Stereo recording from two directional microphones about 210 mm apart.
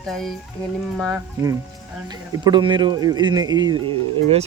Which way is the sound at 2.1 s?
20° right (ahead or behind).